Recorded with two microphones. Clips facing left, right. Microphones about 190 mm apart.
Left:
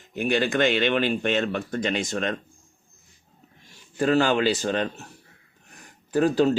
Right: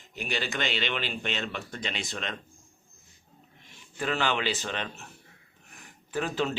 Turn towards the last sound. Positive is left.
turn(degrees=40)  # may be behind; listen again after turning